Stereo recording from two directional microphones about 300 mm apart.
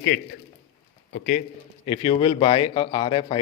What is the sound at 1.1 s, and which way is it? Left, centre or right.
A man's voice, left.